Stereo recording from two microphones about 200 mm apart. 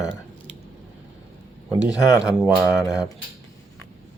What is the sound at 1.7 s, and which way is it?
Speech, 20° left (ahead or behind).